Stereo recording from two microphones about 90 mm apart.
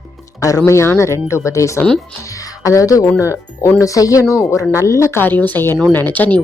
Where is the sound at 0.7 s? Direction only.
30° left (ahead or behind).